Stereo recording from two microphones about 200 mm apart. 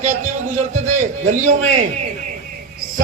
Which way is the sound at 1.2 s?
35° right (ahead or behind).